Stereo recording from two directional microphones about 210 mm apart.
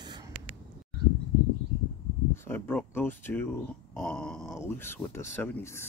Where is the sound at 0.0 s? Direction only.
20° right (ahead or behind).